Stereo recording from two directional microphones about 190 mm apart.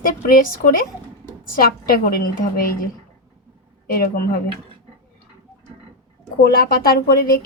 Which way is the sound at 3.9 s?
50° left (ahead or behind).